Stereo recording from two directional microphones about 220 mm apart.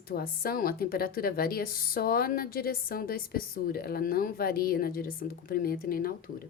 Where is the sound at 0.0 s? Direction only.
45° left (ahead or behind).